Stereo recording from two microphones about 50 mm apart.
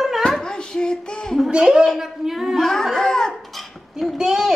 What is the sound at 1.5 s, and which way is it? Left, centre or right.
A child's voice, centre.